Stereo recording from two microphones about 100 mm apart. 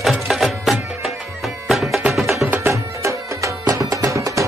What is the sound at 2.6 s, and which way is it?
Music, 30° right (ahead or behind).